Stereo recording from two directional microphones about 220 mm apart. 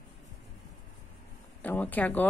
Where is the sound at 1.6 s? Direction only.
10° left (ahead or behind).